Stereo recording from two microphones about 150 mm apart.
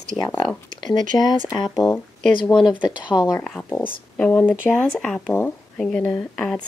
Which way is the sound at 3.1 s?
10° left (ahead or behind).